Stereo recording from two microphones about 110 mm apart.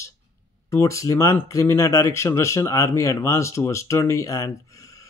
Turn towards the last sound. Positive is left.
turn(degrees=30)  # may be behind; listen again after turning